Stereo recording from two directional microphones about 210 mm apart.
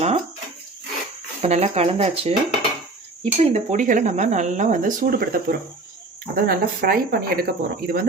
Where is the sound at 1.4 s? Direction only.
30° right (ahead or behind).